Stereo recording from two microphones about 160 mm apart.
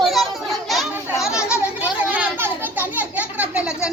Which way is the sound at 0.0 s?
Centre (ahead or behind).